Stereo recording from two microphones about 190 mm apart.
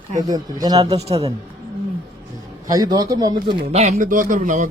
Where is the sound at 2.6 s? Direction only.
20° right (ahead or behind).